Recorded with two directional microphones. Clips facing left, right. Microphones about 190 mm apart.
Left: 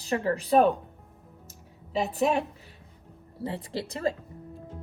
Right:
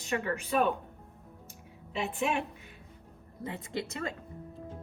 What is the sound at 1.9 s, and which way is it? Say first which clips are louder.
A woman's voice: left 6 dB; 35° left (ahead or behind).